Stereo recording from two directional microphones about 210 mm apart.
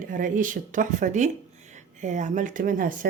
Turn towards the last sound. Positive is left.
turn(degrees=-40)  # may be behind; listen again after turning